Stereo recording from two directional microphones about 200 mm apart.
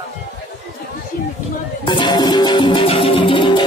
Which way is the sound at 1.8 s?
25° left (ahead or behind).